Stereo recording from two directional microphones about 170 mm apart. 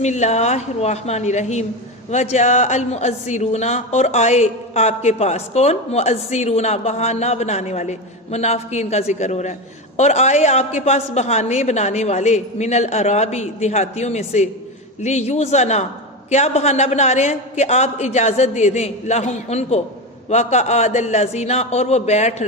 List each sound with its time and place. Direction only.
0.0 s a man's voice: 45° left (ahead or behind)